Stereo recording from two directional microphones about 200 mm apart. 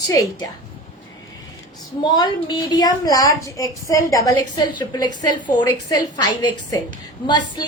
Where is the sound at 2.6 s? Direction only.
20° left (ahead or behind).